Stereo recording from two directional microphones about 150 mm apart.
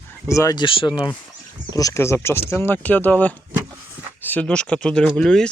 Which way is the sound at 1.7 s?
20° left (ahead or behind).